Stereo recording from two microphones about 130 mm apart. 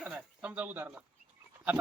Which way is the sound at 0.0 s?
10° right (ahead or behind).